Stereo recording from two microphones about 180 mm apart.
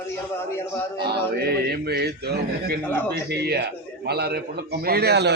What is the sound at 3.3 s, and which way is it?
A man's voice, 65° right (ahead or behind).